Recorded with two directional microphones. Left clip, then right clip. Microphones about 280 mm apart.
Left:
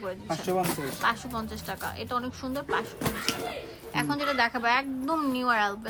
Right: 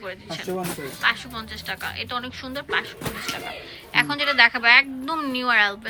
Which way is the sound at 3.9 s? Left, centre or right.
Centre.